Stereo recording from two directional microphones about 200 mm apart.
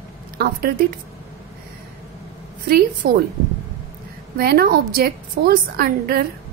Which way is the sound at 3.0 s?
50° right (ahead or behind).